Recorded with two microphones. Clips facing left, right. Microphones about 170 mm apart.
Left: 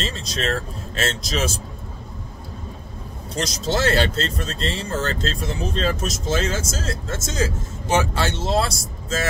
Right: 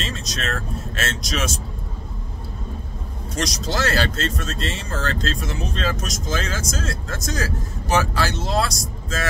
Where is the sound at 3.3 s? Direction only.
25° left (ahead or behind).